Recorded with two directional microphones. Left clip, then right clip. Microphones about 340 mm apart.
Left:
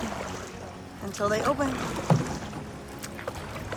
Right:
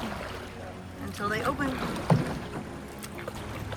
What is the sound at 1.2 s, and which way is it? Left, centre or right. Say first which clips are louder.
Speech: left 4 dB; centre.